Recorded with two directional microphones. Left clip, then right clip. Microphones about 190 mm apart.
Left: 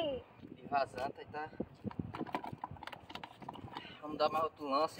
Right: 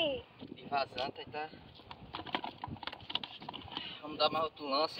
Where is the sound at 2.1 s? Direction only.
15° left (ahead or behind).